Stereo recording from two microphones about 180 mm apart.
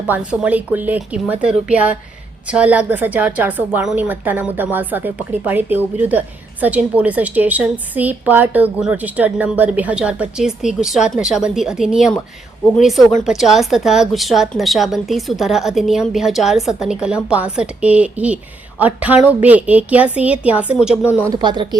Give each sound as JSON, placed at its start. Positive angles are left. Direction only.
{"t": 0.1, "sound": "a woman's voice", "side_deg": -5}
{"t": 21.0, "sound": "speech", "side_deg": 15}
{"t": 21.2, "sound": "speech", "side_deg": -25}